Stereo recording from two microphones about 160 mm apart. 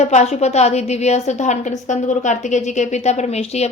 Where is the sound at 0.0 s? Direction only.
45° left (ahead or behind).